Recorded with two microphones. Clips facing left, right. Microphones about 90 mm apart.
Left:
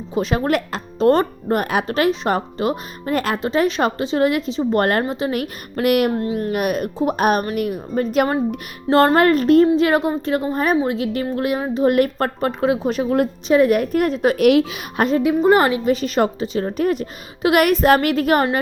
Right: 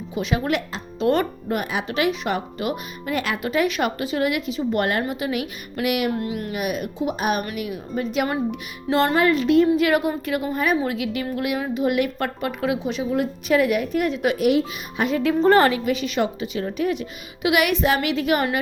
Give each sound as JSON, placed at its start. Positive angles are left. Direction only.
{"t": 0.1, "sound": "speech", "side_deg": 35}
{"t": 6.1, "sound": "speech", "side_deg": 35}
{"t": 6.5, "sound": "speech", "side_deg": 50}
{"t": 9.6, "sound": "speech", "side_deg": 30}
{"t": 12.9, "sound": "speech", "side_deg": 55}
{"t": 14.3, "sound": "speech", "side_deg": 75}
{"t": 14.9, "sound": "speech", "side_deg": 40}
{"t": 15.2, "sound": "a woman's voice", "side_deg": 15}
{"t": 15.8, "sound": "speech", "side_deg": 35}